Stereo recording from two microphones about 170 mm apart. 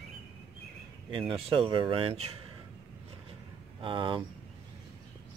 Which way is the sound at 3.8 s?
30° right (ahead or behind).